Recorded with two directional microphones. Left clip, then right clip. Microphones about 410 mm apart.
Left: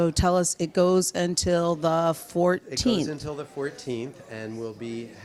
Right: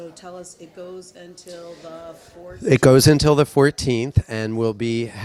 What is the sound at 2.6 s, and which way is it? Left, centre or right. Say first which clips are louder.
Speech: right 13 dB; right.